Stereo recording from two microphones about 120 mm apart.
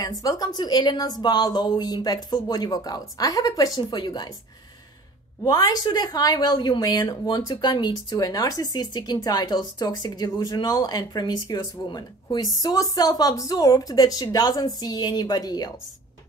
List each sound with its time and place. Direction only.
0.0 s a woman's voice: 30° left (ahead or behind)
5.4 s a woman's voice: 35° left (ahead or behind)